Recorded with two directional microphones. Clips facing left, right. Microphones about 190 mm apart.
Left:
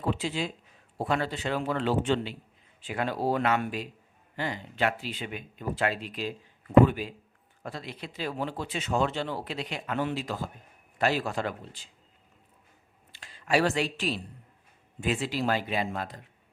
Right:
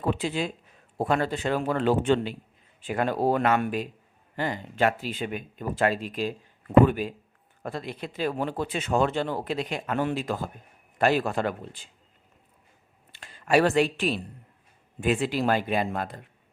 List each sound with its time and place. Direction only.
0.0 s speech: 55° right (ahead or behind)
13.1 s speech: 50° right (ahead or behind)